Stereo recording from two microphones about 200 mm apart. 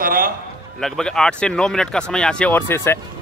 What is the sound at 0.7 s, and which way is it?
Speech, centre (ahead or behind).